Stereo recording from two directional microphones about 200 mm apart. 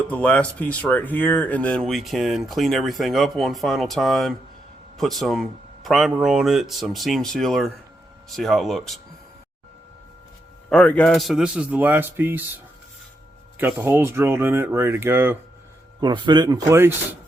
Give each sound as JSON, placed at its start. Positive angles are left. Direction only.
{"t": 0.1, "sound": "speech", "side_deg": 5}
{"t": 10.7, "sound": "speech", "side_deg": 5}
{"t": 13.6, "sound": "speech", "side_deg": -10}
{"t": 16.0, "sound": "speech", "side_deg": -20}